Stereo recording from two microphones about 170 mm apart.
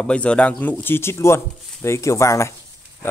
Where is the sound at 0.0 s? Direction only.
5° left (ahead or behind).